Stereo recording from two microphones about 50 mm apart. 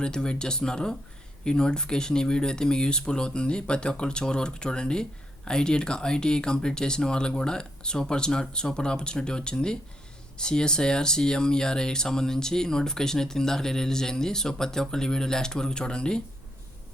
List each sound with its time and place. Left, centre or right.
0.0 s speech: centre